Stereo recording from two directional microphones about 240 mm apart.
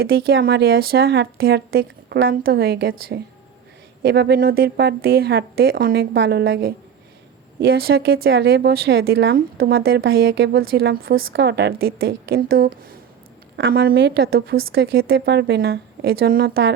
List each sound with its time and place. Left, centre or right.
0.3 s a woman's voice: right